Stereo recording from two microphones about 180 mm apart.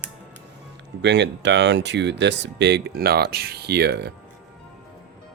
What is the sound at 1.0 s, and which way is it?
Speech, 75° right (ahead or behind).